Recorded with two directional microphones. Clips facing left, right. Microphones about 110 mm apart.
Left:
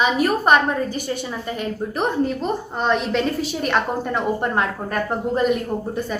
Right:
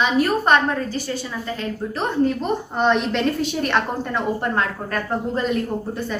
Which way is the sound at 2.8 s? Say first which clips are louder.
Right 1 dB; 5° left (ahead or behind).